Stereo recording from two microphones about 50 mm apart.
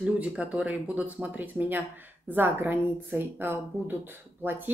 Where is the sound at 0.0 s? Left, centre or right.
Right.